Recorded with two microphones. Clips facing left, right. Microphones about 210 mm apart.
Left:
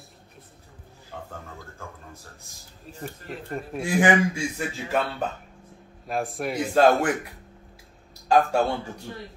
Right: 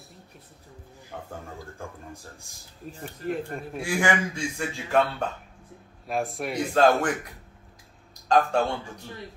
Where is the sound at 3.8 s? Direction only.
20° left (ahead or behind).